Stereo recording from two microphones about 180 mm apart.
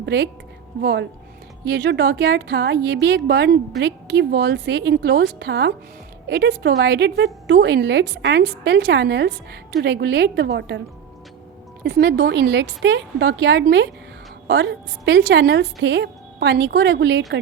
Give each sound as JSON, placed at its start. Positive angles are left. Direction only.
{"t": 0.0, "sound": "a woman's voice", "side_deg": -70}